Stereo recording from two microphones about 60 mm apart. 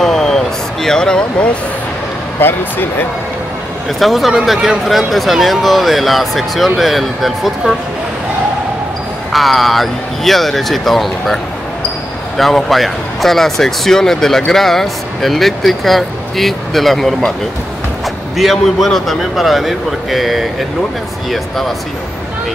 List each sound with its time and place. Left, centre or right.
0.0 s vehicle: centre
2.4 s speech: left
4.0 s speech: centre
4.8 s speech: centre
9.3 s speech: centre
12.4 s speech: centre
18.4 s speech: centre